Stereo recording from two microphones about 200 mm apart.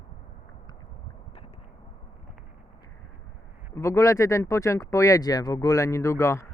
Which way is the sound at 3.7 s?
15° left (ahead or behind).